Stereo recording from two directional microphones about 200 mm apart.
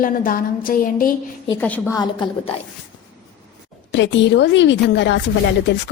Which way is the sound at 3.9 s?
65° left (ahead or behind).